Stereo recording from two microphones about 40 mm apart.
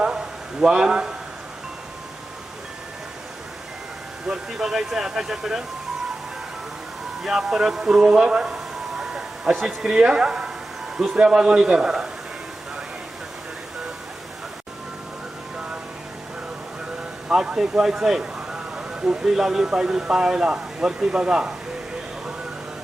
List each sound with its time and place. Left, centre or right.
0.0 s a sound: centre
4.3 s speech: centre
7.2 s speech: centre
9.0 s a sound: centre
9.6 s speech: centre
11.2 s speech: right
17.2 s speech: right
18.2 s a sound: right
19.3 s speech: centre